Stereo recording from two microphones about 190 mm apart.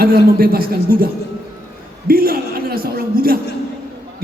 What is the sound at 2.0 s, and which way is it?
A man's voice, 50° right (ahead or behind).